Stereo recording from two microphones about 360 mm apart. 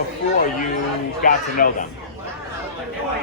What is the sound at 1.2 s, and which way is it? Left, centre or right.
Speech, left.